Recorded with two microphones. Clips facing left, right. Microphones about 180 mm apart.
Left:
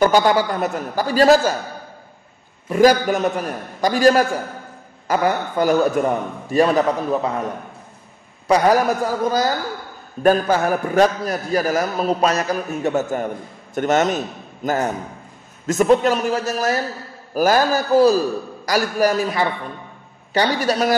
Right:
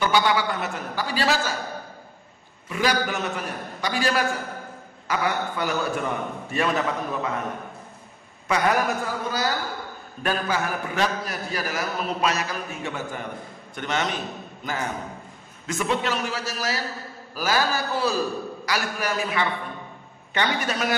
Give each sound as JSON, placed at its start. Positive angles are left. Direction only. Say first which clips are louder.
{"t": 0.0, "sound": "a man's voice", "louder": "left 7 dB", "side_deg": 45}
{"t": 2.7, "sound": "a man's voice", "louder": "left 10 dB", "side_deg": 45}
{"t": 8.5, "sound": "a man's voice", "louder": "left 7 dB", "side_deg": 35}